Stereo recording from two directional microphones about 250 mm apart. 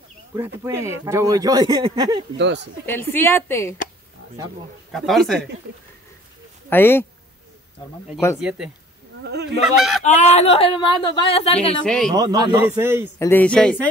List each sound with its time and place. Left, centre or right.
0.4 s speech: centre
2.3 s speech: right
2.9 s a woman's voice: centre
4.9 s speech: centre
6.7 s a woman's voice: centre
8.4 s speech: centre
10.0 s speech: left
11.8 s speech: centre
12.1 s speech: centre
13.2 s a woman's voice: centre